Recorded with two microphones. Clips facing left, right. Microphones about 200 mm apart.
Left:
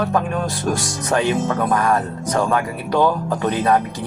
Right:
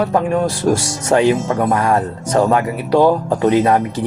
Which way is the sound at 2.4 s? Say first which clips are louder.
Right 4 dB; 25° right (ahead or behind).